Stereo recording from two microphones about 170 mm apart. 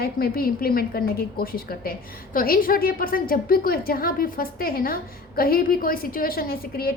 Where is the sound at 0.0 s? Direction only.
60° left (ahead or behind).